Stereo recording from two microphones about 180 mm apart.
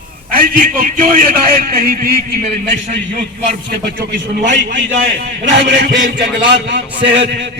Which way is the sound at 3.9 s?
70° right (ahead or behind).